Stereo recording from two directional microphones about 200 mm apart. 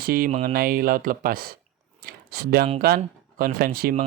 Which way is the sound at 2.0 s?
50° right (ahead or behind).